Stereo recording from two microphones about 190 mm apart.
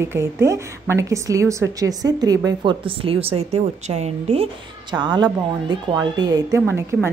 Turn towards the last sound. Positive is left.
turn(degrees=-10)  # may be behind; listen again after turning